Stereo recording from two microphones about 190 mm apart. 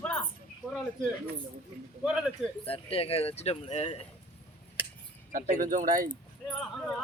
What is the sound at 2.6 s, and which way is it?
Speech, 30° left (ahead or behind).